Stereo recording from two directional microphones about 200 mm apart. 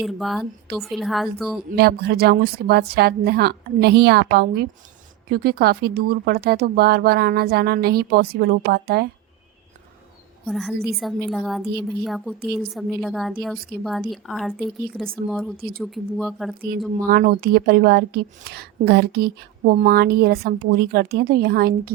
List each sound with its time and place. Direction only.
0.0 s a woman's voice: centre (ahead or behind)
1.7 s a woman's voice: 50° right (ahead or behind)
10.4 s a woman's voice: centre (ahead or behind)
11.6 s a woman's voice: 55° right (ahead or behind)
12.0 s a woman's voice: centre (ahead or behind)
15.5 s a woman's voice: 45° right (ahead or behind)
15.8 s a woman's voice: centre (ahead or behind)
16.6 s a woman's voice: 50° right (ahead or behind)